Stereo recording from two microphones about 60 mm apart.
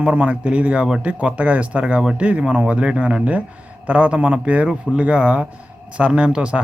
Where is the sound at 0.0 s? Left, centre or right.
Right.